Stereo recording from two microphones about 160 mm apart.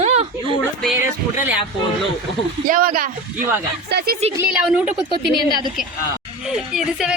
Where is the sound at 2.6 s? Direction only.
65° right (ahead or behind).